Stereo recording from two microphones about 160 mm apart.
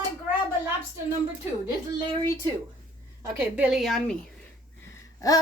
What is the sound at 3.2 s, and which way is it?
Speech, 15° right (ahead or behind).